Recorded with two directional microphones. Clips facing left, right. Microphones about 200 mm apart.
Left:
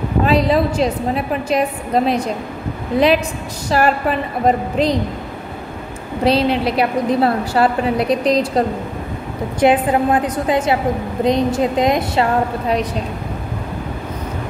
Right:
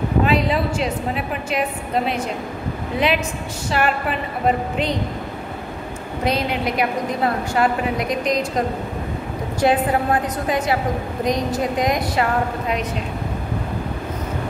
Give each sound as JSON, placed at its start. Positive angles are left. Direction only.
{"t": 0.2, "sound": "a woman's voice", "side_deg": 35}
{"t": 3.7, "sound": "a woman's voice", "side_deg": 40}
{"t": 6.2, "sound": "a woman's voice", "side_deg": 30}
{"t": 9.6, "sound": "a woman's voice", "side_deg": 20}